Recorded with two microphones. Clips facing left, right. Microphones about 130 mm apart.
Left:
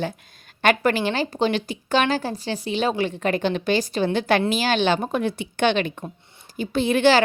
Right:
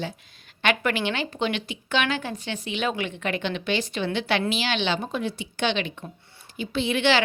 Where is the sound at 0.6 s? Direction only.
40° left (ahead or behind).